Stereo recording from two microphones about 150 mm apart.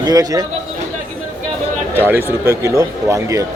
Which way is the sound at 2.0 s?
15° right (ahead or behind).